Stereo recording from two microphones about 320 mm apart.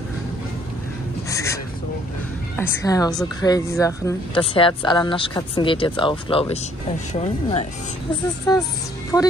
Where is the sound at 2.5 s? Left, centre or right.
Centre.